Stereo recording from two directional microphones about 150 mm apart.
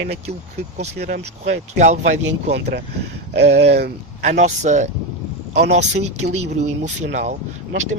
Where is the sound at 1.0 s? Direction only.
50° right (ahead or behind).